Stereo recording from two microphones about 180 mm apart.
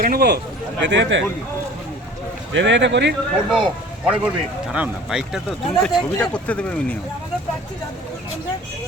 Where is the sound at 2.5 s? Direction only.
85° right.